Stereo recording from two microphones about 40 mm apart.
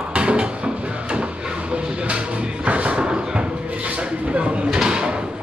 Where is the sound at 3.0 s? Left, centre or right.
Right.